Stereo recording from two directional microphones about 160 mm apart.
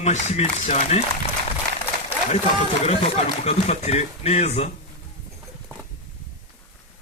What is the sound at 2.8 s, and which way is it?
Speech, 40° left (ahead or behind).